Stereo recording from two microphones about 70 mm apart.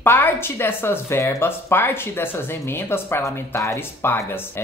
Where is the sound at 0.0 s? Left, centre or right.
Left.